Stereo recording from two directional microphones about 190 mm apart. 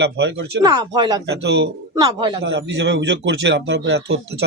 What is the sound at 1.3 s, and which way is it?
Speech, 60° right (ahead or behind).